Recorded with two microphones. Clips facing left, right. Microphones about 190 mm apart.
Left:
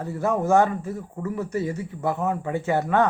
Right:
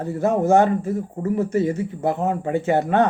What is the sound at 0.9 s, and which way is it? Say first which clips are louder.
Speech: right 6 dB; 45° right (ahead or behind).